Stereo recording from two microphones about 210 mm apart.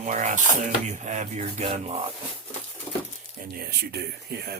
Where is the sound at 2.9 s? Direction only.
5° left (ahead or behind).